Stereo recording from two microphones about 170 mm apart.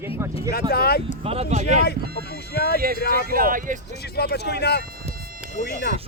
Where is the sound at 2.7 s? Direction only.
60° right (ahead or behind).